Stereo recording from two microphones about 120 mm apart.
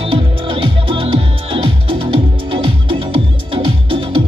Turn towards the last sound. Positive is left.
turn(degrees=-45)  # may be behind; listen again after turning